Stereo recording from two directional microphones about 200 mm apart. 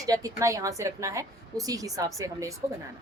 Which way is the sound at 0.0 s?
15° right (ahead or behind).